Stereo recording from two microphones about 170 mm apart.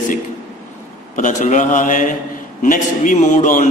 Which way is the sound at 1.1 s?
45° left (ahead or behind).